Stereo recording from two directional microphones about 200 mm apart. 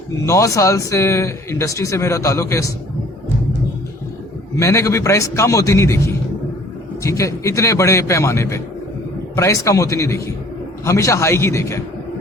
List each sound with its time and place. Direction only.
0.3 s speech: 15° left (ahead or behind)
4.5 s speech: 15° left (ahead or behind)